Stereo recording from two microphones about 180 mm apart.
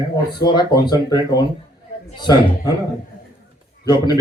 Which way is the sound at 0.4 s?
25° left (ahead or behind).